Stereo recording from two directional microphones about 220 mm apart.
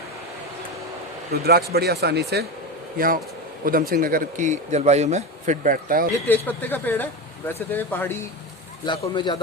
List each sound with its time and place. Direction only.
1.3 s speech: 45° right (ahead or behind)
3.6 s speech: 40° right (ahead or behind)
6.2 s a man's voice: 10° left (ahead or behind)